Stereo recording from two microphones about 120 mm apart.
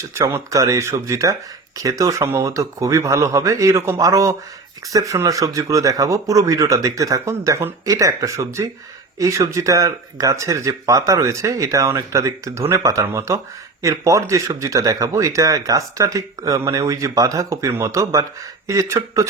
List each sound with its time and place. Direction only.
0.1 s speech: 25° right (ahead or behind)